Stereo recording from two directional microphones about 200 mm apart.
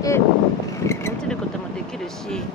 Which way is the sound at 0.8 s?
15° left (ahead or behind).